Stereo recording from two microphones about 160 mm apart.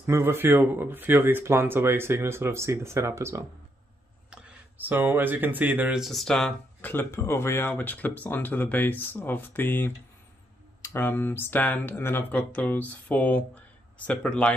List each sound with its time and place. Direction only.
0.0 s speech: 15° right (ahead or behind); by 14.5 s 5° left (ahead or behind)